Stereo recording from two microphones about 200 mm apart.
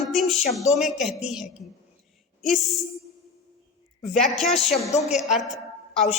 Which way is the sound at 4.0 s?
Centre (ahead or behind).